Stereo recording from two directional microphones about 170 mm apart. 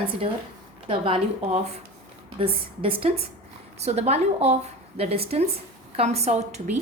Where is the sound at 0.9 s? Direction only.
30° right (ahead or behind).